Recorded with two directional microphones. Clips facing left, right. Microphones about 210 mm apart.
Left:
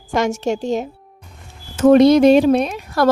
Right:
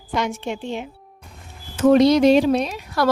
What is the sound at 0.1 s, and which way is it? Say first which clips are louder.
A woman's voice: left 6 dB; 45° left (ahead or behind).